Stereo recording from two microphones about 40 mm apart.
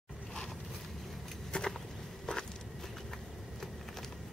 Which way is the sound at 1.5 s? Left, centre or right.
Left.